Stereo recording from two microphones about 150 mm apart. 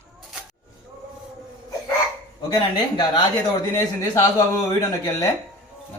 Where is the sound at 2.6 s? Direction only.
35° left (ahead or behind).